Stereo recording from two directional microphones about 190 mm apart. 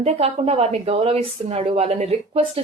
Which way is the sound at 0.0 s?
30° right (ahead or behind).